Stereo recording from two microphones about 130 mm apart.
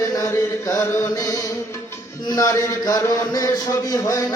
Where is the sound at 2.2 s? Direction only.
25° left (ahead or behind).